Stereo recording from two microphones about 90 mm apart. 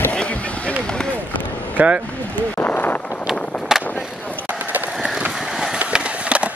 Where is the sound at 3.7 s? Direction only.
5° right (ahead or behind).